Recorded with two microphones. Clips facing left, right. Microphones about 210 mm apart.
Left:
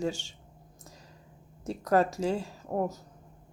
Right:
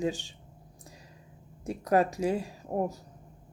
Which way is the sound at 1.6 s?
15° right (ahead or behind).